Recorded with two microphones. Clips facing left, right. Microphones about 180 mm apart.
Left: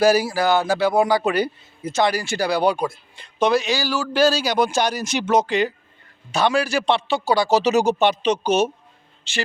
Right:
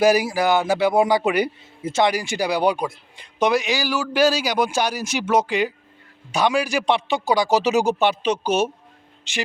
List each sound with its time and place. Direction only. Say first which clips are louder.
0.0 s speech: even; 20° right (ahead or behind)